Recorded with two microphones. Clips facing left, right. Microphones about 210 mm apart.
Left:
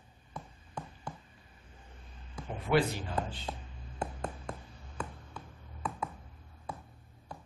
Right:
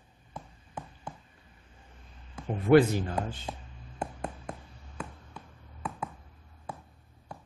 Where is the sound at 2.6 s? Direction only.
45° right (ahead or behind).